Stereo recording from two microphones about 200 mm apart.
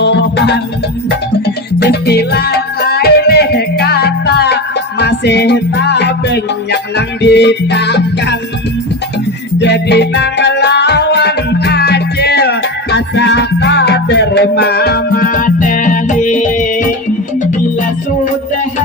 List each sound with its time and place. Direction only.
0.0 s music: 55° left (ahead or behind)
9.6 s music: 60° left (ahead or behind); by 16.9 s 40° left (ahead or behind)